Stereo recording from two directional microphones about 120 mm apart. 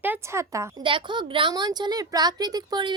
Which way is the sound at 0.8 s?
45° right (ahead or behind).